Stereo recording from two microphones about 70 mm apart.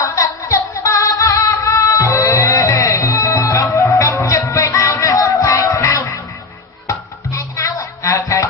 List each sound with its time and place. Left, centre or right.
0.0 s music: left